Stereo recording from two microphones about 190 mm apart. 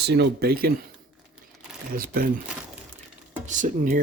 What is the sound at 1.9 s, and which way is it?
Speech, 50° right (ahead or behind).